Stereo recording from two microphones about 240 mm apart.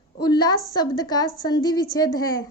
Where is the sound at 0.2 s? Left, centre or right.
Centre.